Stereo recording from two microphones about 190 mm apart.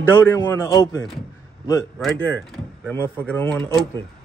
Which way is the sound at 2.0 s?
Centre (ahead or behind).